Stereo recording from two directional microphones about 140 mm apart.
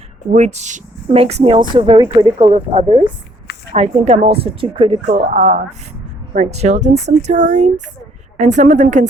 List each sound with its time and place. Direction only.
0.3 s a woman's voice: 55° right (ahead or behind); by 2.5 s 35° right (ahead or behind)
2.5 s a woman's voice: 45° right (ahead or behind)